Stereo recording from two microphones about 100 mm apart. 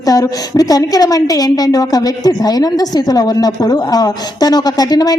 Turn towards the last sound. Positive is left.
turn(degrees=40)  # may be behind; listen again after turning